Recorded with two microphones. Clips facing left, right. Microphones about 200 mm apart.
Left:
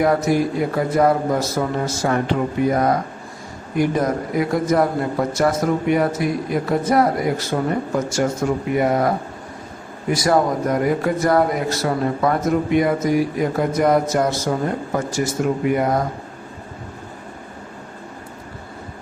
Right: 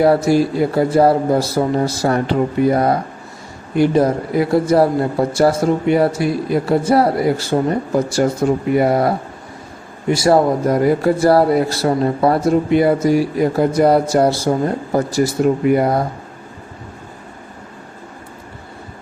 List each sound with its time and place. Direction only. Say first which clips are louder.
0.0 s speech: right 4 dB; 30° right (ahead or behind)